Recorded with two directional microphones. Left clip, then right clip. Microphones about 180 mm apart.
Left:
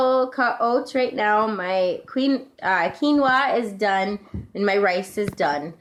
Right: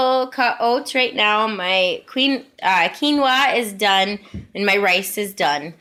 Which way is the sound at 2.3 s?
30° right (ahead or behind).